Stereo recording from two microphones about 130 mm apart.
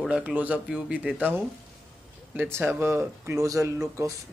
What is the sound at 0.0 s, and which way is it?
Speech, 10° right (ahead or behind).